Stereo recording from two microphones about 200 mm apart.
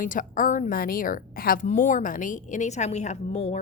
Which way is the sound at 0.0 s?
40° left (ahead or behind).